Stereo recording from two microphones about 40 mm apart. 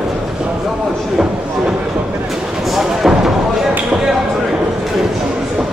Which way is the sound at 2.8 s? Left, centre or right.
Centre.